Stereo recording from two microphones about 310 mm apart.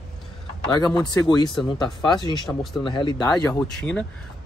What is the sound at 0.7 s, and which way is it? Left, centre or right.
Speech, centre.